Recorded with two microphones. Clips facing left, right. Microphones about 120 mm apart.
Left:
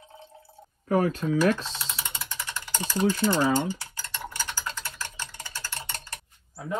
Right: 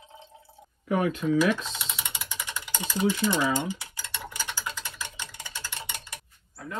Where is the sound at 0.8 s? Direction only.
40° left (ahead or behind).